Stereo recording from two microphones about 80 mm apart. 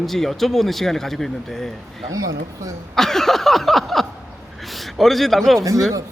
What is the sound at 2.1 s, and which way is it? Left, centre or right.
Speech, right.